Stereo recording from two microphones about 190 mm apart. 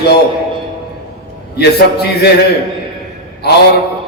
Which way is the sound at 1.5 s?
60° left (ahead or behind).